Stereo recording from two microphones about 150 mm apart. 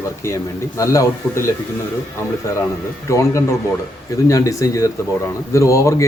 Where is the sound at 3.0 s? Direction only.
20° left (ahead or behind).